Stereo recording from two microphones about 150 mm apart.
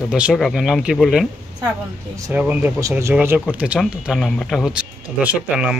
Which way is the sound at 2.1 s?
20° right (ahead or behind).